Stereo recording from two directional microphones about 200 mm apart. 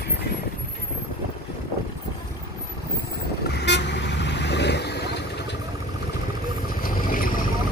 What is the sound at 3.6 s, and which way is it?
Vehicle, 60° left (ahead or behind).